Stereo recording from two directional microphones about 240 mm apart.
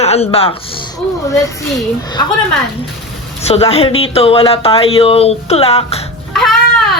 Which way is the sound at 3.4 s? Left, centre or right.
Left.